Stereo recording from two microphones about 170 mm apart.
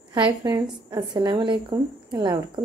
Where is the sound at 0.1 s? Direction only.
20° right (ahead or behind).